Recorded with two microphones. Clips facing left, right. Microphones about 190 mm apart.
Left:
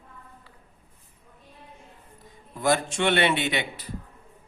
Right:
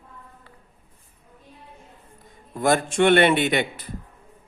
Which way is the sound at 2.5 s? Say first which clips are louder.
Right 3 dB; 50° right (ahead or behind).